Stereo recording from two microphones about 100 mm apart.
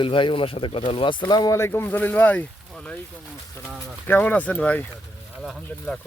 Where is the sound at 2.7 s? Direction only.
10° left (ahead or behind).